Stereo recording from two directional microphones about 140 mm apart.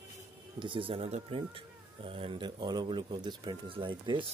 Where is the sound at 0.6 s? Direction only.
40° right (ahead or behind).